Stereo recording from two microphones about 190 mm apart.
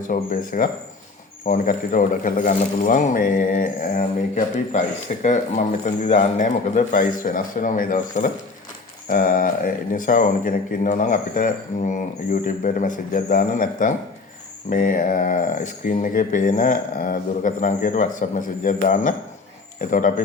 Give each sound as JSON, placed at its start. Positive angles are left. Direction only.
{"t": 0.1, "sound": "speech", "side_deg": 45}